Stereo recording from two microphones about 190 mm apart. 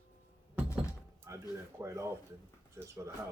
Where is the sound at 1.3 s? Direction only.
15° right (ahead or behind).